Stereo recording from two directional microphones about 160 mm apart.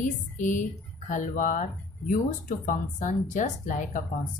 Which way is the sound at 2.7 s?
50° left (ahead or behind).